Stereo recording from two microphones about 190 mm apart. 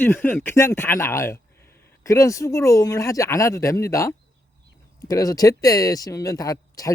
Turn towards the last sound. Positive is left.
turn(degrees=20)  # may be behind; listen again after turning